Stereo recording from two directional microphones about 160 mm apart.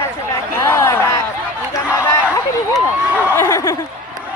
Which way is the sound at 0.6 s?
15° left (ahead or behind).